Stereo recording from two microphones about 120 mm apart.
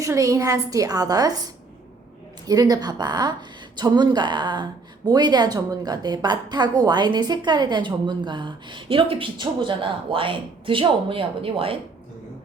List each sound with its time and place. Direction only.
0.0 s a woman's voice: 25° right (ahead or behind)
2.5 s a woman's voice: 35° right (ahead or behind); by 11.8 s 50° right (ahead or behind)